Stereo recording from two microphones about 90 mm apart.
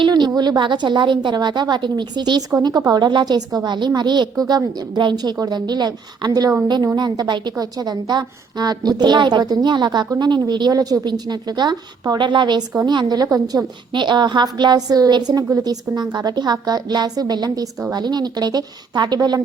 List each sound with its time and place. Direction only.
0.0 s a sound: 55° right (ahead or behind)
0.3 s a woman's voice: 50° right (ahead or behind)
7.5 s a woman's voice: 45° right (ahead or behind)
13.2 s a woman's voice: 40° right (ahead or behind)
13.9 s a woman's voice: 55° right (ahead or behind)